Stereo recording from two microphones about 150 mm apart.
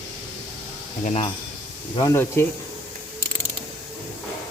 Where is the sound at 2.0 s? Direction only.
20° left (ahead or behind).